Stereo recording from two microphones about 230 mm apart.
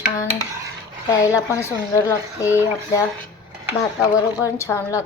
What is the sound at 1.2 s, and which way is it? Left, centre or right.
A woman's voice, centre.